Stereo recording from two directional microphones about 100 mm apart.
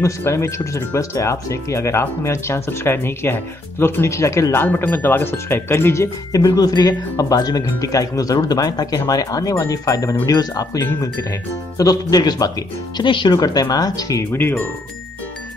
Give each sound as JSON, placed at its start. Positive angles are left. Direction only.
{"t": 0.0, "sound": "speech", "side_deg": 30}
{"t": 13.0, "sound": "speech", "side_deg": 55}
{"t": 14.3, "sound": "speech", "side_deg": 20}